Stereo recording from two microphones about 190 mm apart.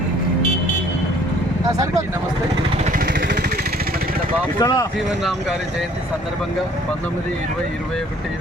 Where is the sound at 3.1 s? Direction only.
55° right (ahead or behind).